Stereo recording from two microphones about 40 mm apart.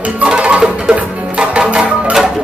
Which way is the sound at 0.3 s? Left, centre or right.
Right.